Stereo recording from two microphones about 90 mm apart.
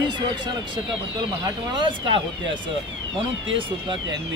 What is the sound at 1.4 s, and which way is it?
Speech, 55° right (ahead or behind).